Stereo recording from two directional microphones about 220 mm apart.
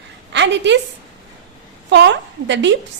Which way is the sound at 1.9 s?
55° right (ahead or behind).